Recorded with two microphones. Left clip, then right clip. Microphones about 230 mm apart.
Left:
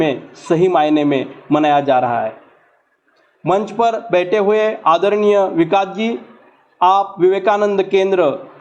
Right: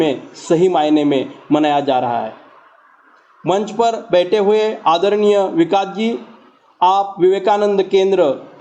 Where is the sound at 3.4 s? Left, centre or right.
Centre.